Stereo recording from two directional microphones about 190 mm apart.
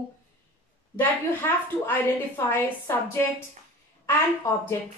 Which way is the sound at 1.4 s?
15° left (ahead or behind).